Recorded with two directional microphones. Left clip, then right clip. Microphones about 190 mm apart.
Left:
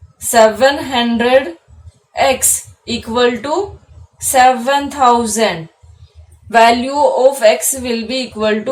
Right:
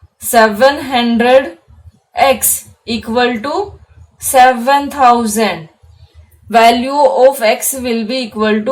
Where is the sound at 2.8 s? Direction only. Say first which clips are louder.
Even; 35° right (ahead or behind).